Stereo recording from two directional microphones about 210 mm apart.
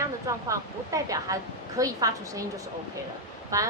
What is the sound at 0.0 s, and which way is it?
A woman's voice, 15° right (ahead or behind).